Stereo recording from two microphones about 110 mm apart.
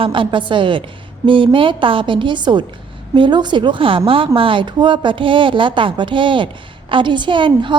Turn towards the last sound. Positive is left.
turn(degrees=-45)  # may be behind; listen again after turning